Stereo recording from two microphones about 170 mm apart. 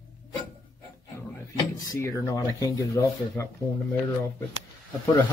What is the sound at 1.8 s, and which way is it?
Speech, 20° left (ahead or behind).